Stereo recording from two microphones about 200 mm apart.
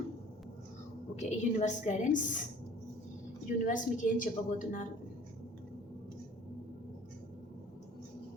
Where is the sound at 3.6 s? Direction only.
40° left (ahead or behind).